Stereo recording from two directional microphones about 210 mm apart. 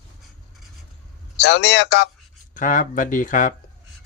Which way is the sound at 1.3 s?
55° left (ahead or behind).